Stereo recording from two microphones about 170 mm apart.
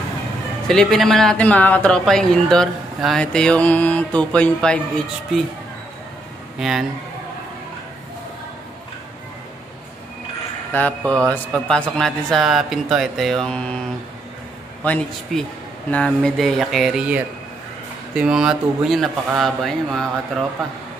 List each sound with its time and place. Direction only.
0.7 s speech: centre (ahead or behind)
6.6 s speech: centre (ahead or behind)
10.7 s a man's voice: 10° left (ahead or behind)
14.8 s a man's voice: 10° left (ahead or behind)